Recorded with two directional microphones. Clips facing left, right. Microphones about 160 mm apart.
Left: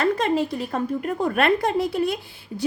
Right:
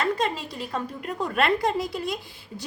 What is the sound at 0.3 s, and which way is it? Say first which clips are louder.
A woman's voice: left 8 dB; 60° left (ahead or behind).